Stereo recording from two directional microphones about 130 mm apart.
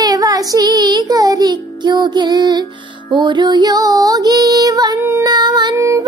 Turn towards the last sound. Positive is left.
turn(degrees=-25)  # may be behind; listen again after turning